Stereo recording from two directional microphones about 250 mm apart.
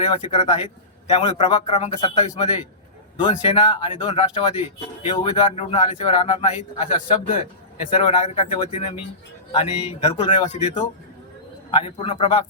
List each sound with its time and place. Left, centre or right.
0.0 s speech: left
8.0 s speech: left